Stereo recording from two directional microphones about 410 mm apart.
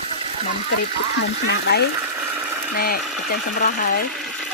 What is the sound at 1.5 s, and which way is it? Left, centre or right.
Speech, left.